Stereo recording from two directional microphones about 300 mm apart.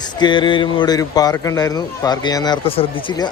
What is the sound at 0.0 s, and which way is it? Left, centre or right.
A man's voice, centre.